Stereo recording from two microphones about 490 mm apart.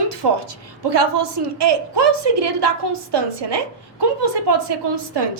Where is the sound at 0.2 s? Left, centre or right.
Right.